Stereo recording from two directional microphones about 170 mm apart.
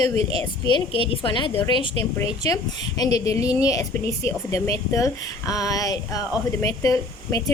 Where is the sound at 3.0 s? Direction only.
20° left (ahead or behind).